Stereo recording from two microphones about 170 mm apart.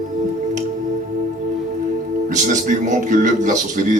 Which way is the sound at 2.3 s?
45° right (ahead or behind).